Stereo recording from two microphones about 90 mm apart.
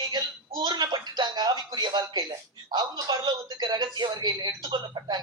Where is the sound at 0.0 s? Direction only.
50° right (ahead or behind).